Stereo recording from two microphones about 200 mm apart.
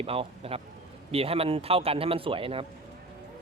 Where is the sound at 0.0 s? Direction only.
30° right (ahead or behind).